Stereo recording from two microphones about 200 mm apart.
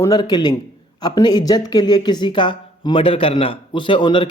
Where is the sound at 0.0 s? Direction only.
20° left (ahead or behind).